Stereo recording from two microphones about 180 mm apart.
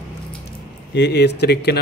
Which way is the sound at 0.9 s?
70° left (ahead or behind).